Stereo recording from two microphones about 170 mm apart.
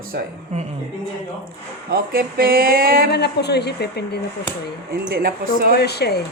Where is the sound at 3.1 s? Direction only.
75° left (ahead or behind).